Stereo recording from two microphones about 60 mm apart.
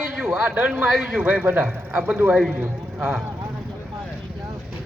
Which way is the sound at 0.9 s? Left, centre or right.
Centre.